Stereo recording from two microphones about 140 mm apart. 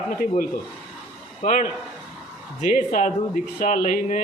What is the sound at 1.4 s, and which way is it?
A man's voice, 65° left (ahead or behind).